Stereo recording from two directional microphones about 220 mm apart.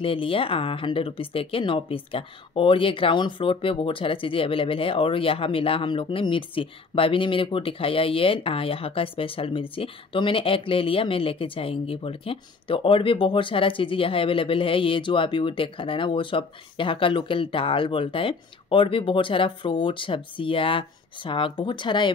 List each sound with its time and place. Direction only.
0.0 s speech: 25° left (ahead or behind)